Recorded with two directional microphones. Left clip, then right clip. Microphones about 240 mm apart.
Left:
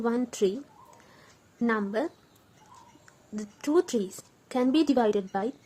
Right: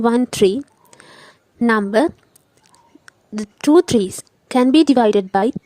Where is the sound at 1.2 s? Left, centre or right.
Right.